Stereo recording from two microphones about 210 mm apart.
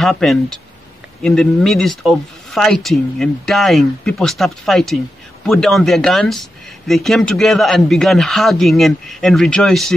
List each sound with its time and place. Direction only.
0.0 s speech: centre (ahead or behind)